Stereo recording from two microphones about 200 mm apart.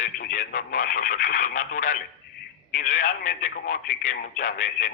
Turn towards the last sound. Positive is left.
turn(degrees=40)  # may be behind; listen again after turning